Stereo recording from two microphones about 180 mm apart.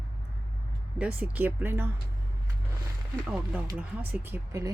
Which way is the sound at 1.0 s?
5° right (ahead or behind).